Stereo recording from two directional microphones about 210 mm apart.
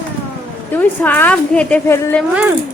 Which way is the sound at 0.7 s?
10° left (ahead or behind).